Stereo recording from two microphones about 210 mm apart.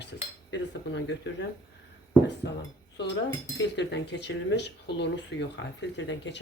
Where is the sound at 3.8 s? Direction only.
55° left (ahead or behind).